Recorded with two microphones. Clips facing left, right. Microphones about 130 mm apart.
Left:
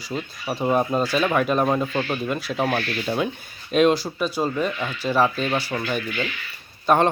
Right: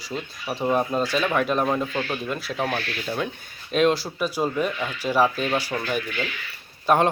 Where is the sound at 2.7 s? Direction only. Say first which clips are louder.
Left 4 dB; 20° left (ahead or behind).